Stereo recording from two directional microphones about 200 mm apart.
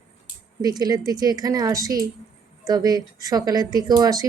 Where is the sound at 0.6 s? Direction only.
20° right (ahead or behind).